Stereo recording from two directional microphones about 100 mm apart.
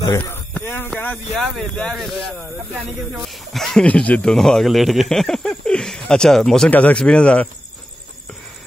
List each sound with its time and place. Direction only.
0.2 s speech: 20° left (ahead or behind)
1.1 s speech: 5° left (ahead or behind)